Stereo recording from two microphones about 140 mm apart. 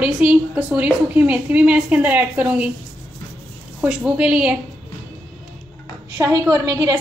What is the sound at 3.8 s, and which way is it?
Speech, 5° right (ahead or behind).